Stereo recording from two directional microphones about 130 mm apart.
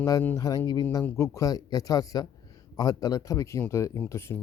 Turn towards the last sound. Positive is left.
turn(degrees=20)  # may be behind; listen again after turning